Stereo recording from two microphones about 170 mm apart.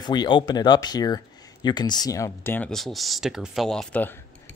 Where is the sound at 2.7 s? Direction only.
Centre (ahead or behind).